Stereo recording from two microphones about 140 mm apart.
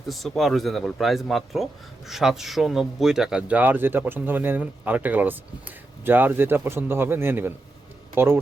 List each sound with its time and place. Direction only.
0.1 s speech: centre (ahead or behind); by 8.4 s 15° right (ahead or behind)